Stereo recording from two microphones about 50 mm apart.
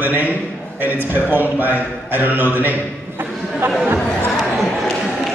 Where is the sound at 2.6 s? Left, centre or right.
Right.